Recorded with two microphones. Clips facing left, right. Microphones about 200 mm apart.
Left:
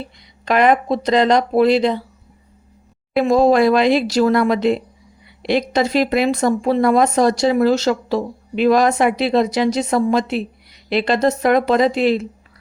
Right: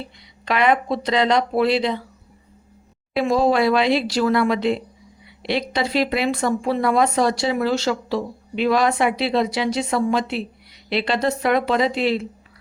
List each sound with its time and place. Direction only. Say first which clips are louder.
0.4 s speech: left 4 dB; 45° left (ahead or behind)
3.2 s speech: left 5 dB; 45° left (ahead or behind)